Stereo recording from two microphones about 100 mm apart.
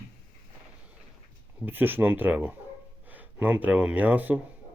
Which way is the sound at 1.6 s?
20° right (ahead or behind).